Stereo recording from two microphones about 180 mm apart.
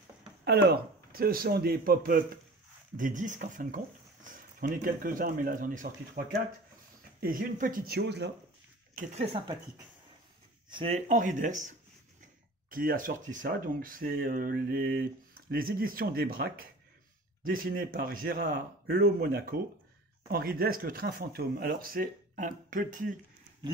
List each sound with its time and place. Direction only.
0.5 s a man's voice: 65° right (ahead or behind)
8.9 s speech: 35° right (ahead or behind)
10.7 s speech: 30° right (ahead or behind)